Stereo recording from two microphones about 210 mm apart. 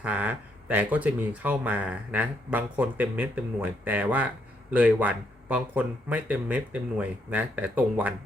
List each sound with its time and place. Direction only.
0.0 s speech: 5° right (ahead or behind)